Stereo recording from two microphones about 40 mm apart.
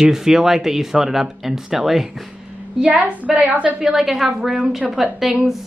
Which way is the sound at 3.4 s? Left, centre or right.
Right.